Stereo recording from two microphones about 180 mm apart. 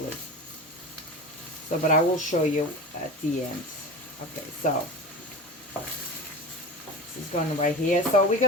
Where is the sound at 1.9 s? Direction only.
45° left (ahead or behind).